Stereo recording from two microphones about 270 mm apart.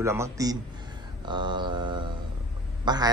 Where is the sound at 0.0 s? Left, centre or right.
Centre.